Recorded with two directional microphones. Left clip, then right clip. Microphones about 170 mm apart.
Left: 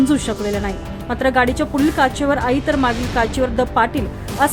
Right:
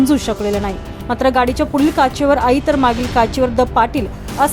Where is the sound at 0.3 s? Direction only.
Centre (ahead or behind).